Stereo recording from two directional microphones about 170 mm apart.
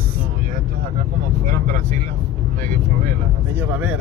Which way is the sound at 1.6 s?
50° right (ahead or behind).